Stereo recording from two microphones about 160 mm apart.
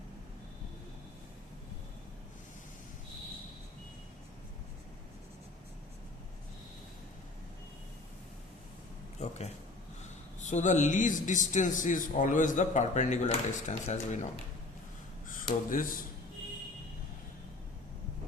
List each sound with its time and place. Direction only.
9.1 s a sound: 45° left (ahead or behind)
10.4 s a man's voice: 50° left (ahead or behind)
15.7 s speech: 60° left (ahead or behind)